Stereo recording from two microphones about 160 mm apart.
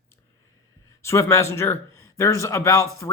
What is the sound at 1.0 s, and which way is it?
A man's voice, 20° left (ahead or behind).